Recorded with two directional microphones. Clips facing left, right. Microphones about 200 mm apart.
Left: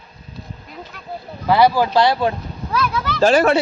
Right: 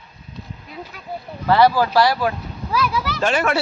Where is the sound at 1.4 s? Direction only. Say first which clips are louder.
Left 1 dB; 15° left (ahead or behind).